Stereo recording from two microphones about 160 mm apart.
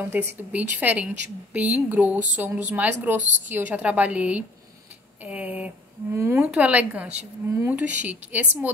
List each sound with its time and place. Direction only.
0.1 s a woman's voice: 10° right (ahead or behind)